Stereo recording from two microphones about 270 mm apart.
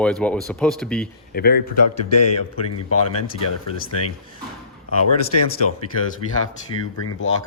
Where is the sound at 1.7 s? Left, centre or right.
Left.